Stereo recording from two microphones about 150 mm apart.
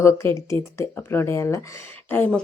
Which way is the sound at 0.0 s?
20° left (ahead or behind).